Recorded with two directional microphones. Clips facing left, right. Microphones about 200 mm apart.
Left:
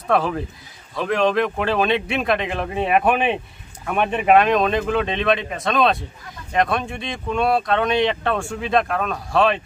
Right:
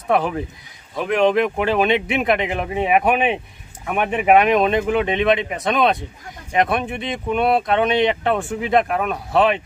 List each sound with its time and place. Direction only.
0.1 s speech: 15° right (ahead or behind)